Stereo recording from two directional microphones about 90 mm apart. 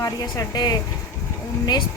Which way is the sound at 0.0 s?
40° left (ahead or behind).